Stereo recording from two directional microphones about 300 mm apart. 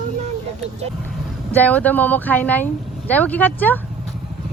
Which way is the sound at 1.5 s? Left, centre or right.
Centre.